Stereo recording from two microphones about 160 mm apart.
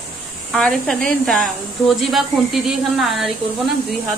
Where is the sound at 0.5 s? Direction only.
5° left (ahead or behind).